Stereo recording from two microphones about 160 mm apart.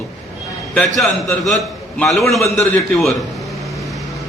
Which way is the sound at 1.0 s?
Centre (ahead or behind).